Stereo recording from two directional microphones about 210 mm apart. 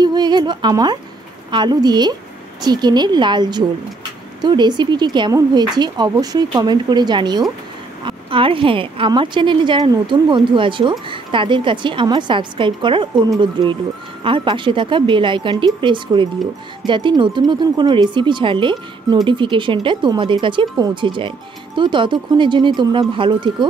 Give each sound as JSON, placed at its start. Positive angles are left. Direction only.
{"t": 0.0, "sound": "speech", "side_deg": -20}